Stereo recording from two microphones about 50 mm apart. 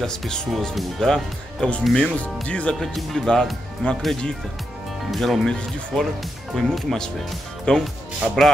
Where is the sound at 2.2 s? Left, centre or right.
Left.